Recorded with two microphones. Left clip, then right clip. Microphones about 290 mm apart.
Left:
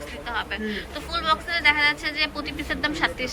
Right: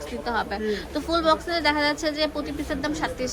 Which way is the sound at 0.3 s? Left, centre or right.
Centre.